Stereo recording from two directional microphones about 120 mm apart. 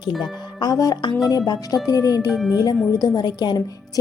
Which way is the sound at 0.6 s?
30° left (ahead or behind).